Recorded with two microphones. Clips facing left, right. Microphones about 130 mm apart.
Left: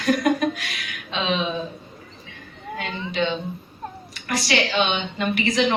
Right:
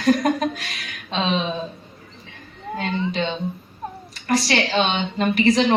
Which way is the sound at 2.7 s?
35° right (ahead or behind).